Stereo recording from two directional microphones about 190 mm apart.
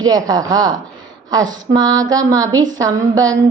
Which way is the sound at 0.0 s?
20° right (ahead or behind).